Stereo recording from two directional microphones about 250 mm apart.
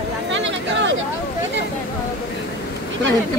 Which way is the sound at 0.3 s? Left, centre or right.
Right.